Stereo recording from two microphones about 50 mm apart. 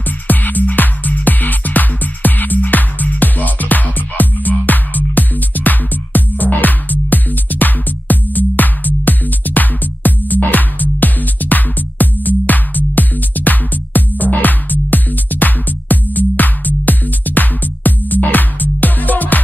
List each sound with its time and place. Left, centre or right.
0.3 s music: left